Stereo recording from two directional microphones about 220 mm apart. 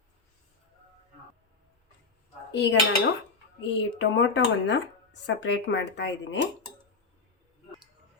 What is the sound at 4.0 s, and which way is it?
Speech, 55° left (ahead or behind).